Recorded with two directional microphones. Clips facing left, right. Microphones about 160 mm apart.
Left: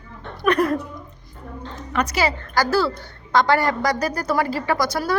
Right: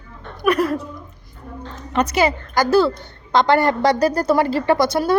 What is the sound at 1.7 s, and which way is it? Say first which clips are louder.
A woman's voice: right 4 dB; 25° right (ahead or behind).